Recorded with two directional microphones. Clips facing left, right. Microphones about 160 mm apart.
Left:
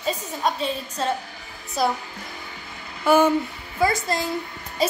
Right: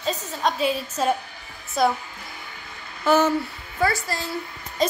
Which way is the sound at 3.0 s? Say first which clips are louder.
Left 2 dB; 10° left (ahead or behind).